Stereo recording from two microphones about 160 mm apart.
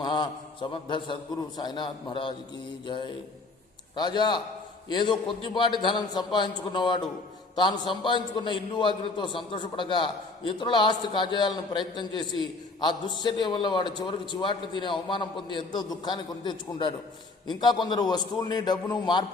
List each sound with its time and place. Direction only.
0.0 s a man's voice: 30° left (ahead or behind)